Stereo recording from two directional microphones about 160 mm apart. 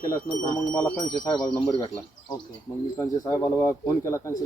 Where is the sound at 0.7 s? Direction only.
10° left (ahead or behind).